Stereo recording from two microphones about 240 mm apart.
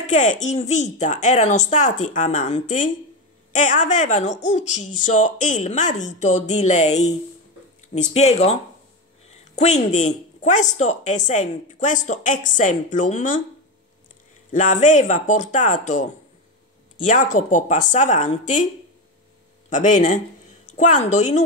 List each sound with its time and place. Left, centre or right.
0.0 s a woman's voice: left
9.6 s speech: left
14.5 s speech: left
19.7 s a woman's voice: left